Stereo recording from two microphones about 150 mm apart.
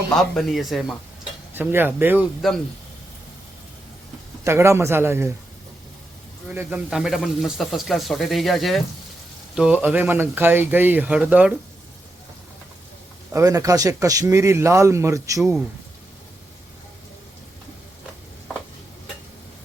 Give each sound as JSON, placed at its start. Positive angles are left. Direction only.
{"t": 0.2, "sound": "speech", "side_deg": 0}
{"t": 1.5, "sound": "speech", "side_deg": -15}
{"t": 2.4, "sound": "speech", "side_deg": 0}
{"t": 4.4, "sound": "speech", "side_deg": -15}
{"t": 6.5, "sound": "speech", "side_deg": -10}
{"t": 13.3, "sound": "speech", "side_deg": -20}